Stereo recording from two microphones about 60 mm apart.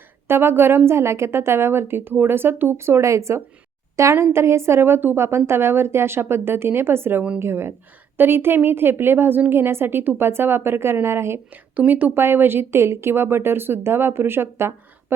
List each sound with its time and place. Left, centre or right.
0.3 s a woman's voice: right
11.5 s a woman's voice: right